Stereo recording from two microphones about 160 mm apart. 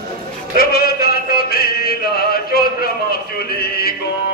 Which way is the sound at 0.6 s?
70° left (ahead or behind).